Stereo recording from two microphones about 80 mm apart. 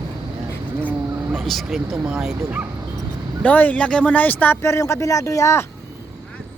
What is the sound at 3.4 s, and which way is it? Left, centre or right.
Speech, left.